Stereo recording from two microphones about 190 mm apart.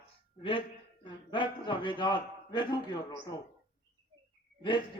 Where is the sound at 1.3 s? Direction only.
25° left (ahead or behind).